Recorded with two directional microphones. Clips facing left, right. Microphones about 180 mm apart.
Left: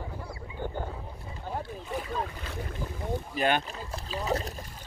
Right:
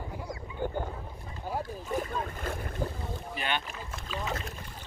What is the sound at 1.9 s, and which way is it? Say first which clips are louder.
Boat: right 1 dB; 45° right (ahead or behind).